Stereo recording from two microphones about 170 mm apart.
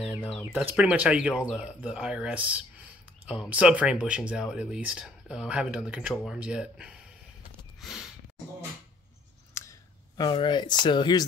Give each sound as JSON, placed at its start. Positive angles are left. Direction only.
{"t": 0.0, "sound": "speech", "side_deg": -10}
{"t": 7.8, "sound": "snort", "side_deg": 0}
{"t": 9.5, "sound": "a sound", "side_deg": 15}